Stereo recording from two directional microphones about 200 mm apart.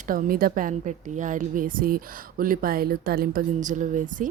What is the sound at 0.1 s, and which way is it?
A woman's voice, 45° right (ahead or behind).